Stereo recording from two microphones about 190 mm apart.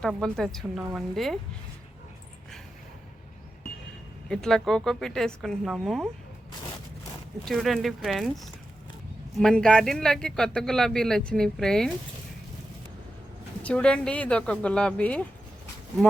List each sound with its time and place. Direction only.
0.2 s speech: centre (ahead or behind)
4.3 s speech: 5° left (ahead or behind)
7.4 s speech: centre (ahead or behind)
13.6 s speech: 5° left (ahead or behind)